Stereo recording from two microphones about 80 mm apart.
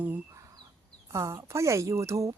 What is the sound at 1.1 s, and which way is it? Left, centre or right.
A woman's voice, right.